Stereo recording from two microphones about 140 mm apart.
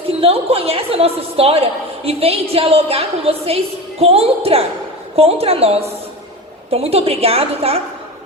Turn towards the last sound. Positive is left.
turn(degrees=-45)  # may be behind; listen again after turning